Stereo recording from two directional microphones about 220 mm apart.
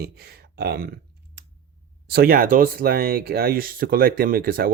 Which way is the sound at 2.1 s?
40° right (ahead or behind).